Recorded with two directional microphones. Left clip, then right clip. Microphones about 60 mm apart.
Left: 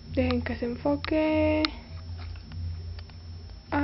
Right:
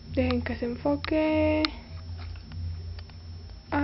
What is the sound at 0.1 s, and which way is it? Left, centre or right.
Speech, right.